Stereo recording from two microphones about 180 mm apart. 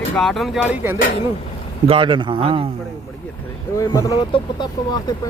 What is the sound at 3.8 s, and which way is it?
Speech, 20° left (ahead or behind).